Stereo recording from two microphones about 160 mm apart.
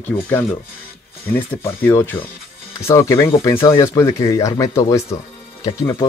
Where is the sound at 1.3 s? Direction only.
15° left (ahead or behind).